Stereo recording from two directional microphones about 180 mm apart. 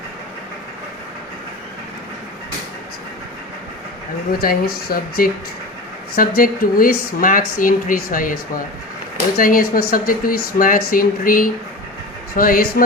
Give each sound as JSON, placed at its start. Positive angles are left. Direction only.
{"t": 4.3, "sound": "speech", "side_deg": 55}